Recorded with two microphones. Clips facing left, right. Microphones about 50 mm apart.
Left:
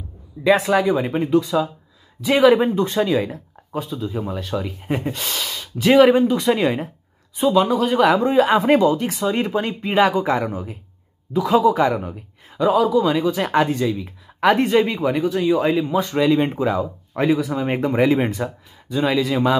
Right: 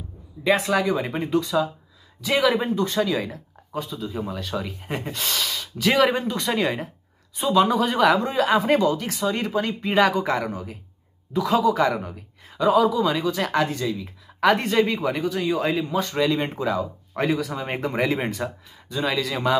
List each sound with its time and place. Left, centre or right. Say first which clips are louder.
0.4 s a sound: left 5 dB; left
0.8 s speech: left 5 dB; centre
2.3 s speech: left 7 dB; left
2.6 s a man's voice: left 4 dB; left
8.4 s speech: left 4 dB; left
9.8 s speech: left 3 dB; centre
14.4 s speech: left 3 dB; centre
16.5 s speech: left 4 dB; left
17.1 s speech: left 5 dB; centre